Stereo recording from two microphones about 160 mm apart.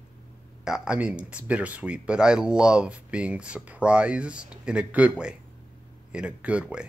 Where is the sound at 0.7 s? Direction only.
5° right (ahead or behind).